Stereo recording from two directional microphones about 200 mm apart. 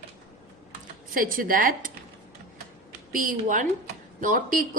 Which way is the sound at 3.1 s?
40° right (ahead or behind).